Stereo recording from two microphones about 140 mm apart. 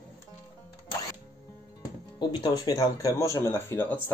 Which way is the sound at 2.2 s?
30° left (ahead or behind).